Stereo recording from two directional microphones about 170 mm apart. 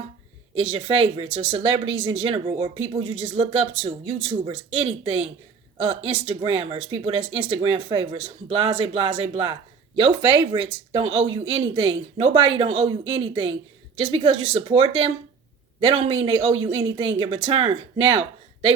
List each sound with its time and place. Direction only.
0.5 s speech: 35° right (ahead or behind)